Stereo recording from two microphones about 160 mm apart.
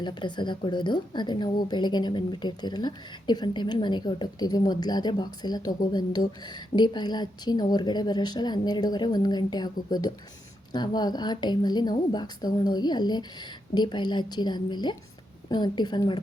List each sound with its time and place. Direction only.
0.0 s a woman's voice: 30° left (ahead or behind)